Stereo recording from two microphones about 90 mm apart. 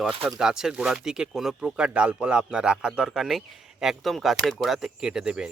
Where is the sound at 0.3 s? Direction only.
5° right (ahead or behind).